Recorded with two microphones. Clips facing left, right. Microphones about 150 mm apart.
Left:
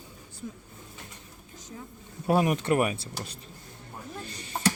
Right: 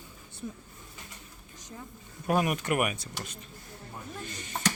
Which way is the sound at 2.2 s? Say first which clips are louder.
Left 3 dB; 30° left (ahead or behind).